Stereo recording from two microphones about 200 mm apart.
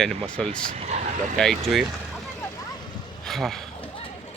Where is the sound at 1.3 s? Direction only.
Centre (ahead or behind).